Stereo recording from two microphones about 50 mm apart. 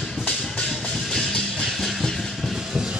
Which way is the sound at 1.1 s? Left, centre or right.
Centre.